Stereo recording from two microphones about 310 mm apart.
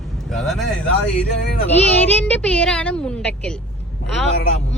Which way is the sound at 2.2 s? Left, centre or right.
Centre.